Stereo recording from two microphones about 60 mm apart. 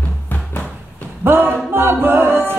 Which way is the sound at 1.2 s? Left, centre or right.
Right.